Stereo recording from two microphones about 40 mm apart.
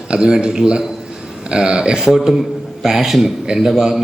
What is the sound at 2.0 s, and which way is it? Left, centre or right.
A man's voice, centre.